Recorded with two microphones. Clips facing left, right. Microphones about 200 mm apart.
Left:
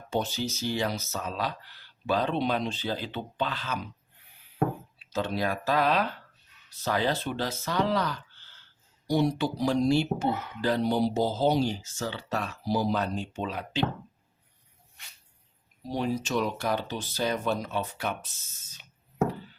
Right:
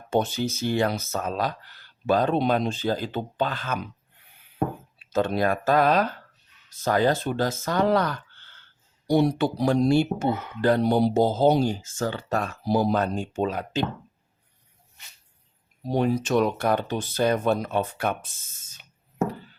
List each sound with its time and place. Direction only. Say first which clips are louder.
0.1 s speech: right 5 dB; 55° right (ahead or behind)
5.1 s speech: right 6 dB; 50° right (ahead or behind)
15.9 s speech: right 6 dB; 55° right (ahead or behind)